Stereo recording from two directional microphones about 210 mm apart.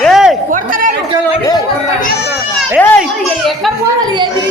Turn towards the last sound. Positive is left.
turn(degrees=10)  # may be behind; listen again after turning